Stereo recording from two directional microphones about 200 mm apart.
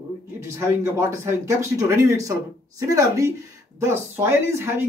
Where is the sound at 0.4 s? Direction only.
15° right (ahead or behind).